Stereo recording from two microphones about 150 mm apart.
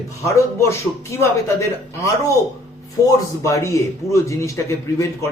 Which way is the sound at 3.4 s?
20° left (ahead or behind).